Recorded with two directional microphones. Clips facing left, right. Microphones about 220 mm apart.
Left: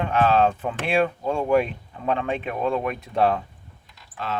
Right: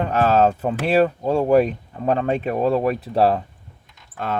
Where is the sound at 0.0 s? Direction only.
40° right (ahead or behind).